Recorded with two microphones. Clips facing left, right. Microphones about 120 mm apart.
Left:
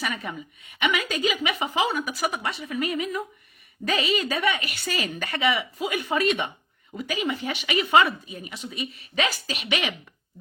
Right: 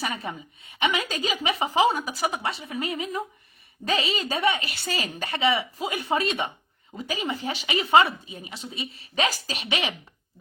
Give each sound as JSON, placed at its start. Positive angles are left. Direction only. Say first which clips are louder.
{"t": 0.0, "sound": "a woman's voice", "louder": "even", "side_deg": -30}